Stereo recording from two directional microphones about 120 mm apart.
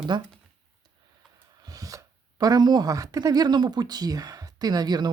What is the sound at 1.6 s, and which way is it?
Speech, 30° right (ahead or behind).